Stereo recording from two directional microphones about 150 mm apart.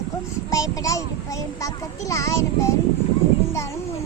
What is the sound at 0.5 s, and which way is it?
A child's voice, 20° left (ahead or behind).